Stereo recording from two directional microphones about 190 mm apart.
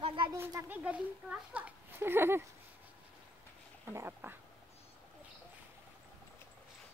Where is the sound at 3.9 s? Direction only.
10° right (ahead or behind).